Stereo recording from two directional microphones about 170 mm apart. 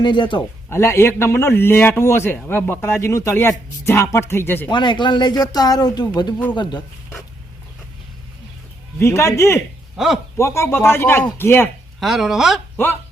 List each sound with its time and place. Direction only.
0.0 s speech: 30° left (ahead or behind)
0.7 s speech: 15° left (ahead or behind)
4.7 s speech: 25° left (ahead or behind)
9.0 s speech: 15° left (ahead or behind)
10.0 s speech: 5° right (ahead or behind)
10.3 s speech: 15° left (ahead or behind)
11.9 s speech: centre (ahead or behind)
12.7 s speech: 10° left (ahead or behind)